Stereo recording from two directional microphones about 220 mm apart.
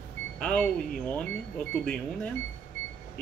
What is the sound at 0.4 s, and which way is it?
Speech, 5° left (ahead or behind).